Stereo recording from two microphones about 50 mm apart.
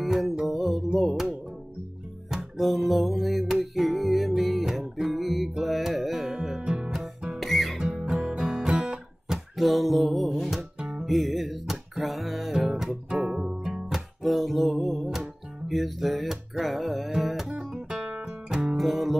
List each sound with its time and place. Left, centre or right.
0.0 s music: centre
6.6 s music: centre
7.3 s music: centre
7.8 s music: centre
9.6 s music: centre
10.8 s music: centre
11.1 s music: centre
14.2 s music: centre
17.2 s guitar: centre
18.1 s music: centre
18.8 s music: centre